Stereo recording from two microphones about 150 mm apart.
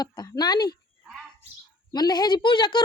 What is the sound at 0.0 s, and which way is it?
Speech, 25° left (ahead or behind).